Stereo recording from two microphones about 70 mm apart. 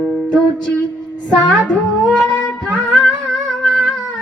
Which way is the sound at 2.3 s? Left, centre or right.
Centre.